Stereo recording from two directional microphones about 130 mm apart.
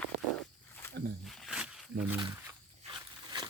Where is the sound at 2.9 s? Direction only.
35° right (ahead or behind).